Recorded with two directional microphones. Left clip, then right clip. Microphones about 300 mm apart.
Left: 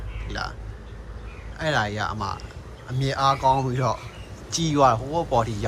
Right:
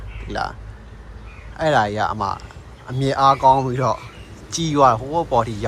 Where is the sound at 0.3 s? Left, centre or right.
Centre.